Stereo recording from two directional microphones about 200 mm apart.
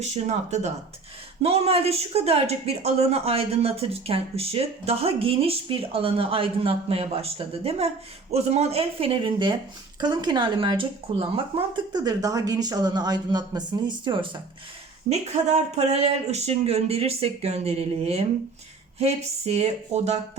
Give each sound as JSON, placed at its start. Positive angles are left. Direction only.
{"t": 0.0, "sound": "speech", "side_deg": -35}